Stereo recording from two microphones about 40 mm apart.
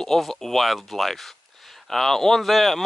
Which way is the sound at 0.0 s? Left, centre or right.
Centre.